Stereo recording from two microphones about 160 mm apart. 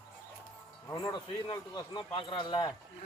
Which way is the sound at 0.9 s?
25° left (ahead or behind).